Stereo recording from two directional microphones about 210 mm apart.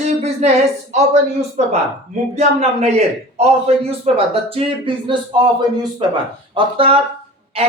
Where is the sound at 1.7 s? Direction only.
30° right (ahead or behind).